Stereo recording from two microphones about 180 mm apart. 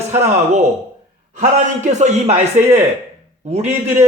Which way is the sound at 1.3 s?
40° right (ahead or behind).